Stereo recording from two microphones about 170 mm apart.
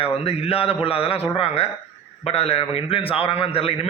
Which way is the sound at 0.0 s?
35° left (ahead or behind).